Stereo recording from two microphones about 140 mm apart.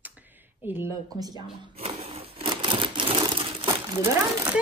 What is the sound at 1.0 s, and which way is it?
Speech, 30° right (ahead or behind).